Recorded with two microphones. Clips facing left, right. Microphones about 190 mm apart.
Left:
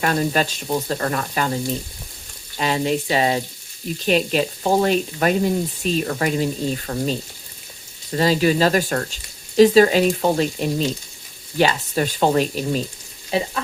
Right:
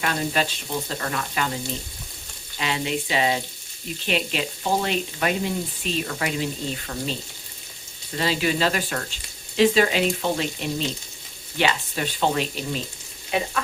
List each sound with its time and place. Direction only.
0.0 s speech: 45° left (ahead or behind)
2.6 s speech: 40° left (ahead or behind)
8.1 s speech: 40° left (ahead or behind)
13.3 s speech: 30° left (ahead or behind)